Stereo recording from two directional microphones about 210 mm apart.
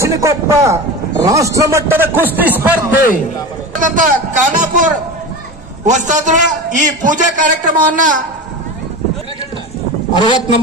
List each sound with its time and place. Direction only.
0.0 s a man's voice: 15° right (ahead or behind)
3.8 s a man's voice: 40° right (ahead or behind)
5.9 s a man's voice: 35° right (ahead or behind)
10.1 s a man's voice: 20° left (ahead or behind)